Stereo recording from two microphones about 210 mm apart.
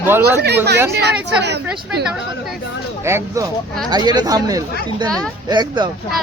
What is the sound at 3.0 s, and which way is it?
Speech, 15° right (ahead or behind).